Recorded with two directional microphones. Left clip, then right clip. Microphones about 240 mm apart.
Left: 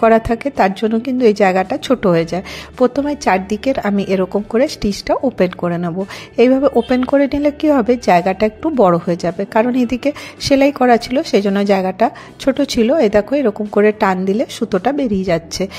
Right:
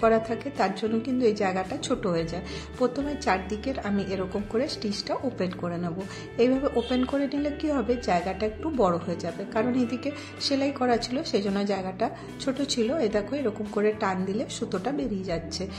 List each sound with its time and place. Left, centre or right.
0.0 s a woman's voice: left